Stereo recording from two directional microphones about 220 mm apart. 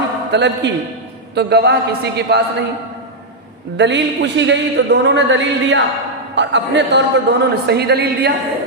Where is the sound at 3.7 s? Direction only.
50° right (ahead or behind).